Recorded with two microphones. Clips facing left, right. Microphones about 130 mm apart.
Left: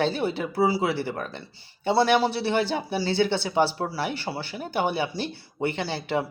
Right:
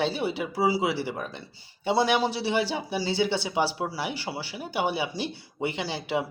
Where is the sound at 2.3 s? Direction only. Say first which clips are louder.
Left 2 dB; 55° left (ahead or behind).